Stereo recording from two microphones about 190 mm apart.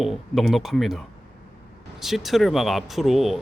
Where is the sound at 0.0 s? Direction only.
Centre (ahead or behind).